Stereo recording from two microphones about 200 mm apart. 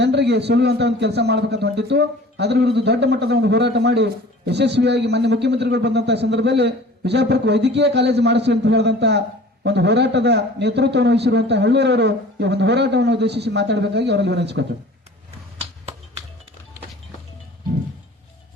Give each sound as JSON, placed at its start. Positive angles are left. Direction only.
{"t": 0.0, "sound": "a man's voice", "side_deg": -60}